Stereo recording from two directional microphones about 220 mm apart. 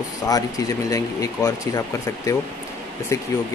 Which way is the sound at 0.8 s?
15° left (ahead or behind).